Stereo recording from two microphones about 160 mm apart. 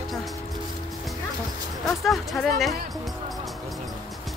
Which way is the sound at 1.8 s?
Centre (ahead or behind).